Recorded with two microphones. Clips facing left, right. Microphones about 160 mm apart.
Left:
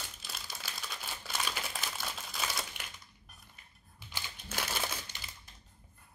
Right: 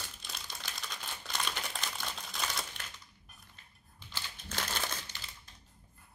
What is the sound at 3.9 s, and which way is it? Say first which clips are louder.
Crushing: even; 10° left (ahead or behind).